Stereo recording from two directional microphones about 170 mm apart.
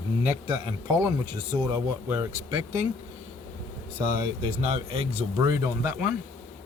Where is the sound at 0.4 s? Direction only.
25° right (ahead or behind).